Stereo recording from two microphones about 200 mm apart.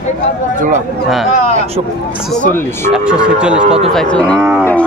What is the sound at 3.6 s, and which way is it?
Speech, 30° right (ahead or behind).